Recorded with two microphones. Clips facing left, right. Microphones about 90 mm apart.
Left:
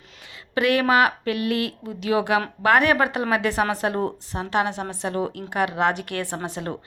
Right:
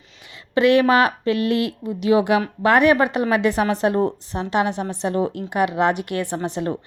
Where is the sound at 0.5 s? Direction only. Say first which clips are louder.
Right 4 dB; 25° right (ahead or behind).